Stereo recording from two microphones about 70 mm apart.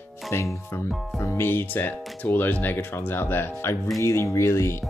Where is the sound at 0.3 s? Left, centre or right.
Left.